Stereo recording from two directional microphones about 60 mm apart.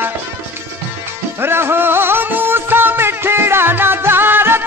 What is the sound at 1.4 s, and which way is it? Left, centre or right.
Music, right.